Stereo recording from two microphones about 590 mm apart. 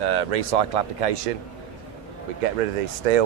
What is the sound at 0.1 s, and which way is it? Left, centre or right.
Speech, right.